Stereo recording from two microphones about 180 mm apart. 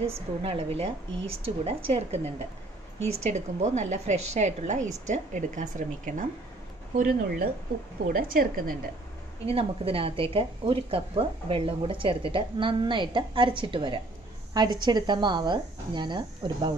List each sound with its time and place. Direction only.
0.0 s a woman's voice: 30° right (ahead or behind); by 8.7 s 50° right (ahead or behind)
9.5 s a woman's voice: 30° right (ahead or behind)